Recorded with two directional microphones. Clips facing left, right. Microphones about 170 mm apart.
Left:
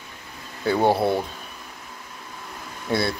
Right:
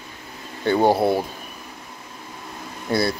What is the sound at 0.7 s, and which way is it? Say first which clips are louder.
Speech: right 2 dB; centre (ahead or behind).